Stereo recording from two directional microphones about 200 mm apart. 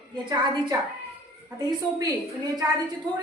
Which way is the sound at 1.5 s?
20° right (ahead or behind).